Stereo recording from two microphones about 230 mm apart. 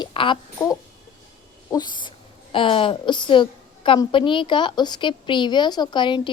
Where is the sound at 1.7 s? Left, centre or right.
Centre.